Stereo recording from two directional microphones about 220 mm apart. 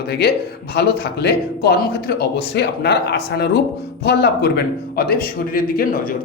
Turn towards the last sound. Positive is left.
turn(degrees=40)  # may be behind; listen again after turning